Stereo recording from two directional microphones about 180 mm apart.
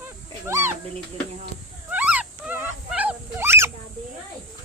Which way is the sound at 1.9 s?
10° right (ahead or behind).